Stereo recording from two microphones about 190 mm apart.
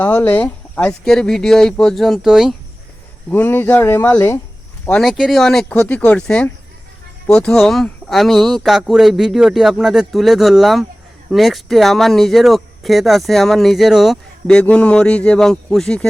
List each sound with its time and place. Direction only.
0.0 s speech: 10° left (ahead or behind)
3.2 s speech: 10° left (ahead or behind)